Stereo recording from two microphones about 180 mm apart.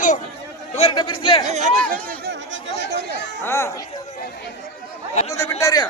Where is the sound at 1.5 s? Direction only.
40° right (ahead or behind).